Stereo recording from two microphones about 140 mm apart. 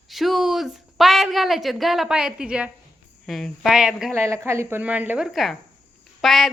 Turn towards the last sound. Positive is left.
turn(degrees=0)  # may be behind; listen again after turning